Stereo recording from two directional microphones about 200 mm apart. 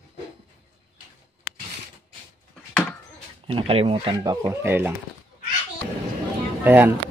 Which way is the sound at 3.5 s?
30° right (ahead or behind).